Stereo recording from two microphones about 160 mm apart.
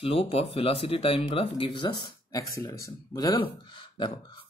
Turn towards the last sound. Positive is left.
turn(degrees=30)  # may be behind; listen again after turning